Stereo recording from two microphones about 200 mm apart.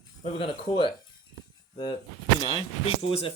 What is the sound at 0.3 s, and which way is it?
Speech, 25° left (ahead or behind).